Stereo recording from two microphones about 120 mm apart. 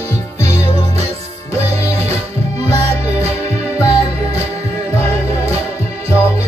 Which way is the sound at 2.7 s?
25° left (ahead or behind).